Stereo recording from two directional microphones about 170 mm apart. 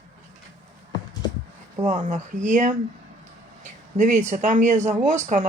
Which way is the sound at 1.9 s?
45° right (ahead or behind).